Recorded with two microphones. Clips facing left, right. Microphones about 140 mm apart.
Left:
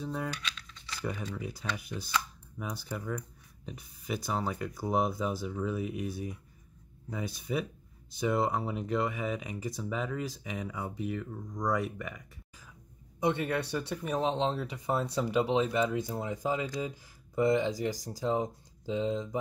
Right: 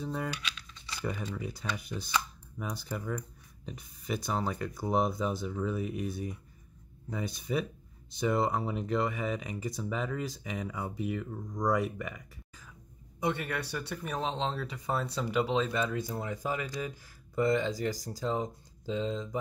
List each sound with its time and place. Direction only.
0.0 s speech: centre (ahead or behind)
13.2 s speech: 25° left (ahead or behind)